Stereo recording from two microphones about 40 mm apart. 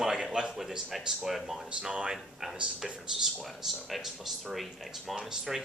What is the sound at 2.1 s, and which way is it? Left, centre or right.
Speech, centre.